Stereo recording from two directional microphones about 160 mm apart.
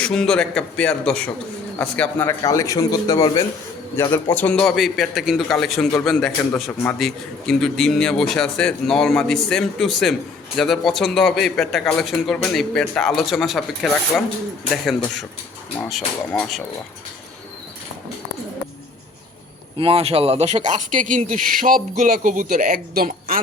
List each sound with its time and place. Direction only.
0.0 s a man's voice: 5° left (ahead or behind)
2.4 s a man's voice: 20° left (ahead or behind); by 16.6 s centre (ahead or behind)
19.8 s speech: 40° right (ahead or behind); by 23.4 s 65° right (ahead or behind)